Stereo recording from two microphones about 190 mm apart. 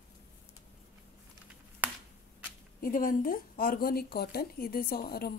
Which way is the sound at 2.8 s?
45° left (ahead or behind).